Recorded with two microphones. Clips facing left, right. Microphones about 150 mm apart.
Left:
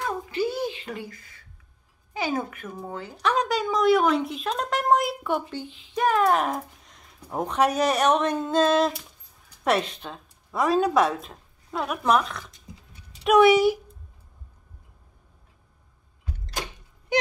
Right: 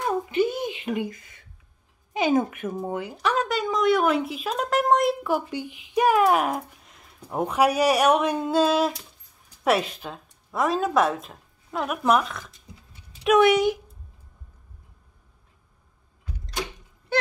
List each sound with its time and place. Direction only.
0.3 s a sound: 20° right (ahead or behind)
2.1 s speech: 20° right (ahead or behind); by 5.4 s centre (ahead or behind)
5.5 s a woman's voice: 15° right (ahead or behind); by 13.7 s 5° left (ahead or behind)
17.1 s speech: 15° left (ahead or behind)